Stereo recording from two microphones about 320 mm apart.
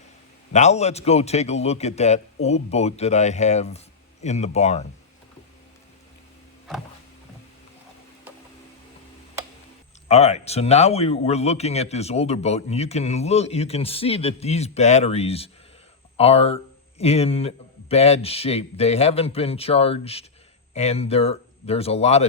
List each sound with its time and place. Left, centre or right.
0.5 s a man's voice: left
10.1 s a man's voice: centre